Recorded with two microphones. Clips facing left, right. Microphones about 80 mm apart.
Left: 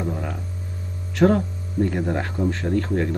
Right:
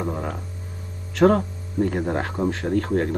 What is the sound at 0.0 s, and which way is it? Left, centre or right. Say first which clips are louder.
Speech: right 1 dB; right.